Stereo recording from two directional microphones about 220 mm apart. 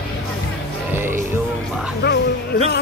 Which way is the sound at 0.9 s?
10° right (ahead or behind).